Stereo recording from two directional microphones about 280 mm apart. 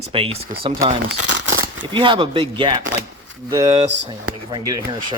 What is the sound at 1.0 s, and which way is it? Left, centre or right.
Crumpling, right.